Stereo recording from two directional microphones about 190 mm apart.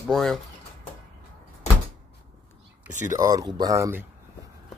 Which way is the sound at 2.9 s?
40° right (ahead or behind).